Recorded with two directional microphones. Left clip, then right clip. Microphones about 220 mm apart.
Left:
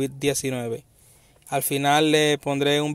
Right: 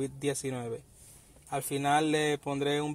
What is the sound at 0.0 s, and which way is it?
A man's voice, 40° left (ahead or behind).